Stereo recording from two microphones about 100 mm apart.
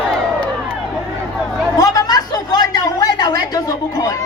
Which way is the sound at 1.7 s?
40° left (ahead or behind).